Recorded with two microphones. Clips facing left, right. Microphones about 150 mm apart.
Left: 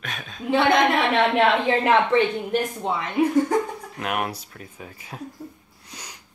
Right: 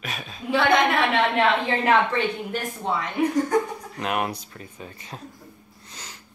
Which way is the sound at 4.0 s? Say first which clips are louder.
Right 1 dB; 5° left (ahead or behind).